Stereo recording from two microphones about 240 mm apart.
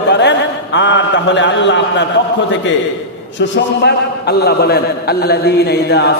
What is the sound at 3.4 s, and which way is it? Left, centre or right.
A man's voice, left.